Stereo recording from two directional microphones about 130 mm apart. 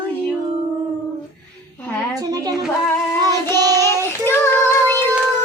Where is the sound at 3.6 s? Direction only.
30° right (ahead or behind).